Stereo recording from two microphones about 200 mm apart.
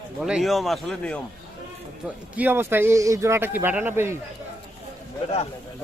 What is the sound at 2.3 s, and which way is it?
A man's voice, 10° right (ahead or behind).